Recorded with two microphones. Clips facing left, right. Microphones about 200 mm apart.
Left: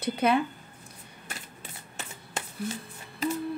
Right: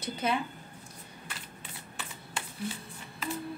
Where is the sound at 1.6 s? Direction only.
40° left (ahead or behind).